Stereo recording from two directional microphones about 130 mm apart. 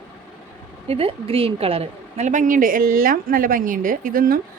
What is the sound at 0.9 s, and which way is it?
Speech, 45° right (ahead or behind).